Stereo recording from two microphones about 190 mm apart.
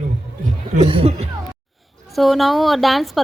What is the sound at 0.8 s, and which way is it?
Music, 30° right (ahead or behind).